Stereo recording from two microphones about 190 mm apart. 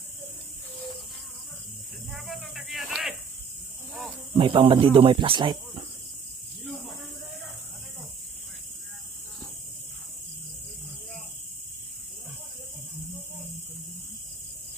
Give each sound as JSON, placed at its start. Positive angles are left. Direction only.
{"t": 2.0, "sound": "snake", "side_deg": 0}
{"t": 4.4, "sound": "speech", "side_deg": -25}
{"t": 6.6, "sound": "snake", "side_deg": 0}